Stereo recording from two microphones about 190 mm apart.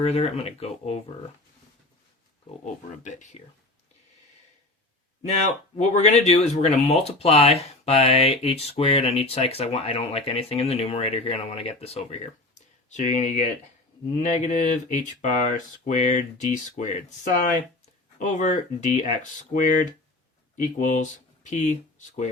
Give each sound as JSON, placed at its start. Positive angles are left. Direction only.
{"t": 0.0, "sound": "speech", "side_deg": 35}
{"t": 3.0, "sound": "speech", "side_deg": 40}
{"t": 5.2, "sound": "speech", "side_deg": 35}
{"t": 12.5, "sound": "a sound", "side_deg": 40}
{"t": 14.1, "sound": "speech", "side_deg": 35}
{"t": 20.7, "sound": "speech", "side_deg": 40}